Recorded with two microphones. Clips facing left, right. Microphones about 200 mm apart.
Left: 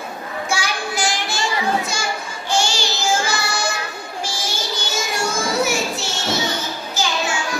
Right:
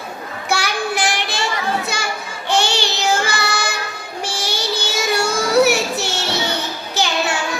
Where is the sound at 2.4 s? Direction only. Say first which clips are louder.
Right 3 dB; 60° right (ahead or behind).